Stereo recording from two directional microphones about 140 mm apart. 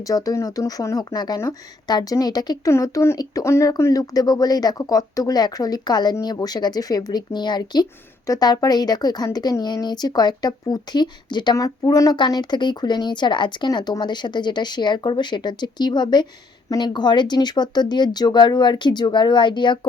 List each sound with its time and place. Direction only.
0.0 s speech: 25° left (ahead or behind)